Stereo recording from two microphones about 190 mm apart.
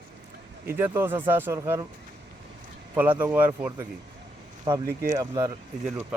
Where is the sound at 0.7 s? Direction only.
10° right (ahead or behind).